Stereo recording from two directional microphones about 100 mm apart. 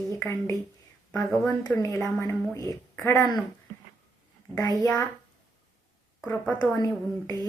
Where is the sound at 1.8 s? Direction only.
30° left (ahead or behind).